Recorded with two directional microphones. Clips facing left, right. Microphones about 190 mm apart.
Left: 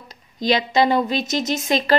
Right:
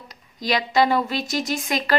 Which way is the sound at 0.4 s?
25° left (ahead or behind).